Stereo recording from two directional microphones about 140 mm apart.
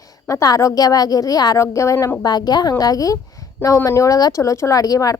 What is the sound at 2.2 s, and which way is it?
A woman's voice, 30° left (ahead or behind).